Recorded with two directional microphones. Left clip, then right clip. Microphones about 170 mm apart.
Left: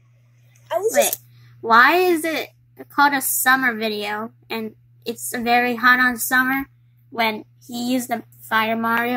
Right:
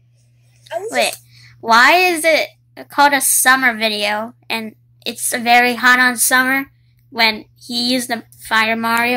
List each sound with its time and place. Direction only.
0.9 s a woman's voice: 15° right (ahead or behind)